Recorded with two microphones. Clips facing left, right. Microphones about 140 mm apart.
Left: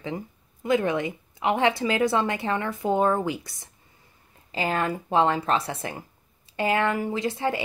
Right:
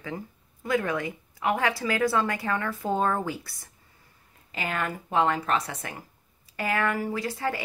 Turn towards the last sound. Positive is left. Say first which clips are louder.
# left 3 dB
turn(degrees=25)  # may be behind; listen again after turning